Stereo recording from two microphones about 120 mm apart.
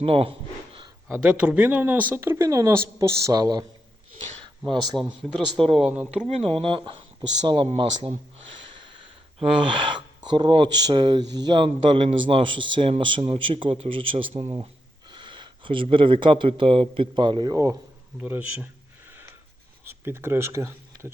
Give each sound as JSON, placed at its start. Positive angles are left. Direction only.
{"t": 0.0, "sound": "a sound", "side_deg": -50}
{"t": 1.1, "sound": "speech", "side_deg": -10}
{"t": 4.9, "sound": "speech", "side_deg": 0}
{"t": 6.2, "sound": "speech", "side_deg": -50}
{"t": 8.8, "sound": "gasp", "side_deg": -45}
{"t": 10.2, "sound": "a man's voice", "side_deg": -40}
{"t": 18.2, "sound": "speech", "side_deg": -15}
{"t": 19.9, "sound": "speech", "side_deg": -20}